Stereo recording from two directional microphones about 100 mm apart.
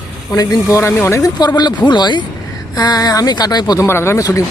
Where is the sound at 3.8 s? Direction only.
25° left (ahead or behind).